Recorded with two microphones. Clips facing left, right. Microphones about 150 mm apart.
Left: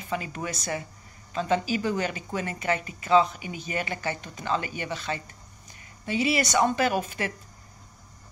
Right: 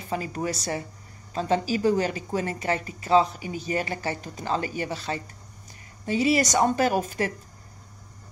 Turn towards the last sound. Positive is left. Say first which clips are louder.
# right 2 dB
turn(degrees=-40)  # may be behind; listen again after turning